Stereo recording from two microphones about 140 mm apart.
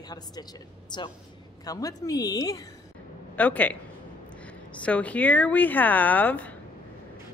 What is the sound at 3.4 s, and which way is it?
Speech, 10° left (ahead or behind).